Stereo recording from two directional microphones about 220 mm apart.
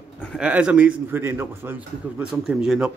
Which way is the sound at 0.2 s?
Centre (ahead or behind).